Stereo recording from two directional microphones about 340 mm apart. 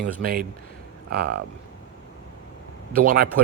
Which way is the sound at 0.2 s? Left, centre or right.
Right.